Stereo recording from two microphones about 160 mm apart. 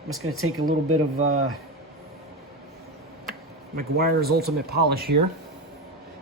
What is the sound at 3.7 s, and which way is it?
Speech, 70° right (ahead or behind).